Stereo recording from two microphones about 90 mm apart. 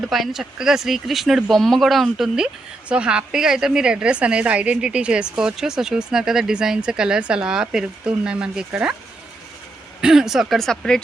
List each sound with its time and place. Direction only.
0.1 s a woman's voice: 5° right (ahead or behind)
10.0 s speech: 5° right (ahead or behind)